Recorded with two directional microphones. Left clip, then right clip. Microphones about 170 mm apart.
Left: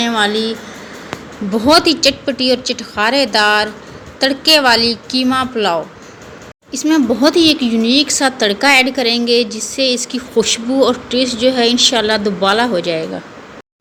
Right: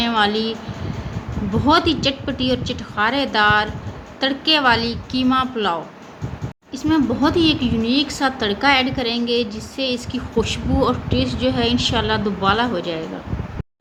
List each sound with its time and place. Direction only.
0.0 s a woman's voice: 10° left (ahead or behind)
1.6 s speech: 15° left (ahead or behind)